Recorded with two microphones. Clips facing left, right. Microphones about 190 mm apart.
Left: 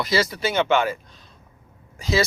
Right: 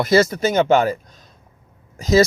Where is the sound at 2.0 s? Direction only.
40° right (ahead or behind).